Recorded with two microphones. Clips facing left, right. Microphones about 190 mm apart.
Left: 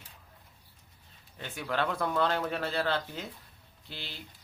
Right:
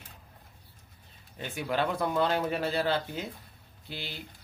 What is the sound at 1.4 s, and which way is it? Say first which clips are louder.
Speech: right 2 dB; 10° right (ahead or behind).